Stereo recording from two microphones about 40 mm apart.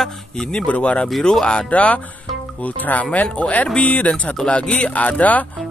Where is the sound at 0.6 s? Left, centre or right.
Left.